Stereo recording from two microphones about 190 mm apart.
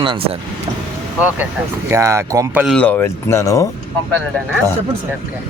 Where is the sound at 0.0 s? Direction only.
25° right (ahead or behind).